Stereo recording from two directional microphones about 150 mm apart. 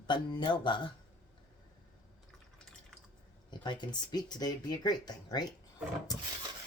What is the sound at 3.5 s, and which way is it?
Speech, 30° left (ahead or behind).